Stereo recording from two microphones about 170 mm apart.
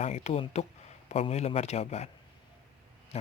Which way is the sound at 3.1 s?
40° left (ahead or behind).